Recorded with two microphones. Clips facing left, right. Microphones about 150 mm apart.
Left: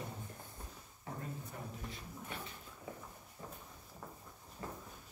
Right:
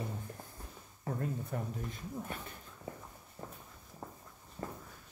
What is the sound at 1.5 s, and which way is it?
Speech, 55° right (ahead or behind).